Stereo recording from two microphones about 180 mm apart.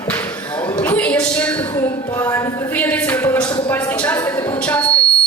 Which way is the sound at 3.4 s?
25° left (ahead or behind).